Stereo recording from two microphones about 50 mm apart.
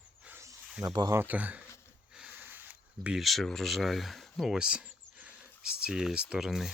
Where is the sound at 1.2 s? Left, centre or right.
Right.